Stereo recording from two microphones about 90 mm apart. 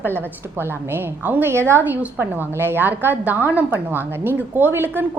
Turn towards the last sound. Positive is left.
turn(degrees=-25)  # may be behind; listen again after turning